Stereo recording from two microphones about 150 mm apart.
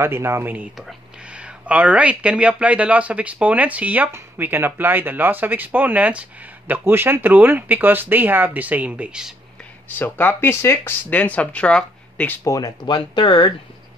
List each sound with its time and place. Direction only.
0.0 s speech: 15° right (ahead or behind)
9.8 s speech: 10° left (ahead or behind)
12.4 s speech: 25° left (ahead or behind)